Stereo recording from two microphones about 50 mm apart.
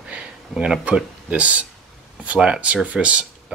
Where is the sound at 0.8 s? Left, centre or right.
Right.